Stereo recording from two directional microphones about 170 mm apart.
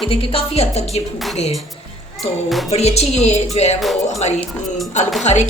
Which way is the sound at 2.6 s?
40° left (ahead or behind).